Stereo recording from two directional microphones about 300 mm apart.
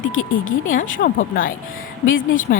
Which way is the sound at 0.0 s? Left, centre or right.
Left.